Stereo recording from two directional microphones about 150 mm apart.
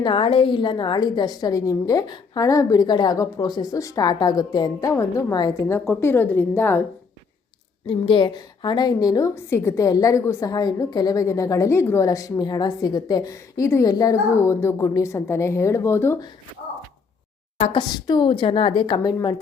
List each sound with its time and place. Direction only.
0.0 s a woman's voice: 35° left (ahead or behind); by 6.8 s 15° left (ahead or behind)
7.9 s a woman's voice: 35° left (ahead or behind); by 16.1 s 15° left (ahead or behind)
17.6 s a woman's voice: 35° left (ahead or behind)